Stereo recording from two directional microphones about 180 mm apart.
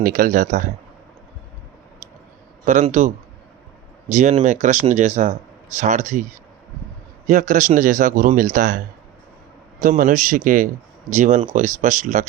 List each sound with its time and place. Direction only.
0.0 s speech: 50° right (ahead or behind)
2.6 s speech: 45° right (ahead or behind)
4.1 s speech: 40° right (ahead or behind)
7.3 s speech: 45° right (ahead or behind)
10.0 s speech: 45° right (ahead or behind)